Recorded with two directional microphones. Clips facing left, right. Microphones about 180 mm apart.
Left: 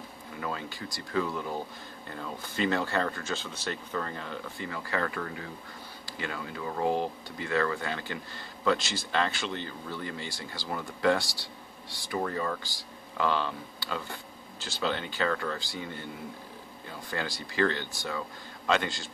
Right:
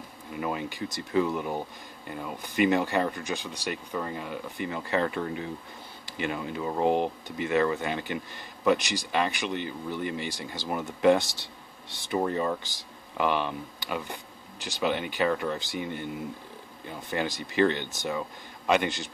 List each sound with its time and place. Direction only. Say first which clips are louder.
0.4 s speech: right 5 dB; 15° right (ahead or behind)